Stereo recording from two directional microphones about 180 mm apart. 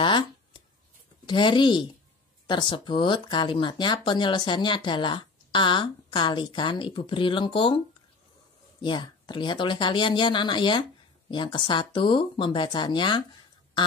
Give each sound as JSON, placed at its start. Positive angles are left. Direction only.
{"t": 0.0, "sound": "shuffling cards", "side_deg": 25}
{"t": 1.2, "sound": "speech", "side_deg": 25}
{"t": 8.8, "sound": "speech", "side_deg": 25}
{"t": 13.8, "sound": "a sound", "side_deg": 25}